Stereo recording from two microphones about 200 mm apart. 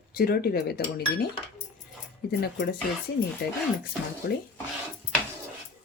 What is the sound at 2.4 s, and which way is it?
Speech, 50° left (ahead or behind).